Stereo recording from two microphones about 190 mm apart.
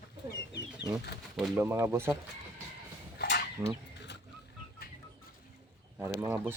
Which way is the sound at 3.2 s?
60° left (ahead or behind).